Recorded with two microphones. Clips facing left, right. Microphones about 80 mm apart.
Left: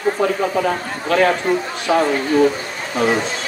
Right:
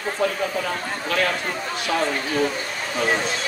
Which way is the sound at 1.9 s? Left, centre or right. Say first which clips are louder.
Left 8 dB; left.